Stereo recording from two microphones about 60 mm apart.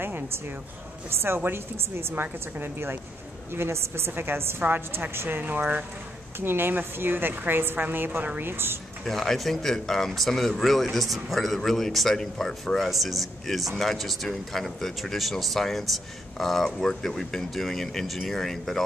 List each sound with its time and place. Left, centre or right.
1.2 s a woman's voice: right
9.0 s speech: centre